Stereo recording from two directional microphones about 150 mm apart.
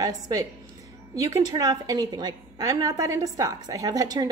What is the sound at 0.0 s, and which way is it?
A woman's voice, 25° right (ahead or behind).